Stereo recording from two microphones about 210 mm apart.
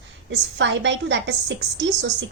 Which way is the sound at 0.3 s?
60° right (ahead or behind).